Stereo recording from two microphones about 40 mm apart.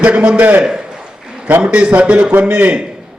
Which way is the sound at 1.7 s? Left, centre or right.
Right.